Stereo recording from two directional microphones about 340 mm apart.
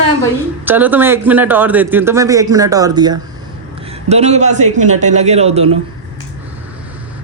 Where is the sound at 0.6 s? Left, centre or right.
Centre.